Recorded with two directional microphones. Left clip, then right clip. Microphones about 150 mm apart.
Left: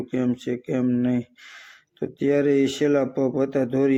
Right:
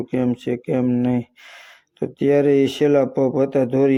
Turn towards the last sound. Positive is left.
turn(degrees=-35)  # may be behind; listen again after turning